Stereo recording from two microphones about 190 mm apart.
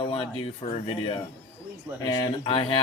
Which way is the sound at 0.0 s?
30° left (ahead or behind).